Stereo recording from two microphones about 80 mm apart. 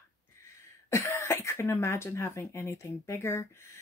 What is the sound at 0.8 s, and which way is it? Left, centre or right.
Speech, left.